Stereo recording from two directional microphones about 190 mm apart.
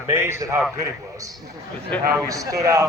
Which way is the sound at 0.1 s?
15° right (ahead or behind).